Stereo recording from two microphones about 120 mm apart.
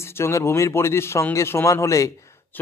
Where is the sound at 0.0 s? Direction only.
20° left (ahead or behind).